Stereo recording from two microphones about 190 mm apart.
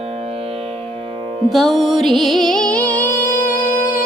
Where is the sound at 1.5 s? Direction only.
Centre (ahead or behind).